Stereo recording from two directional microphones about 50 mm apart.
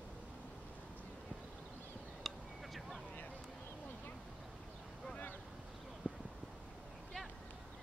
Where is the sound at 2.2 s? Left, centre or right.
Centre.